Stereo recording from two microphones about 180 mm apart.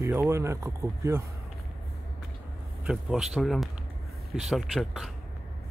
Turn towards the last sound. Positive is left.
turn(degrees=0)  # may be behind; listen again after turning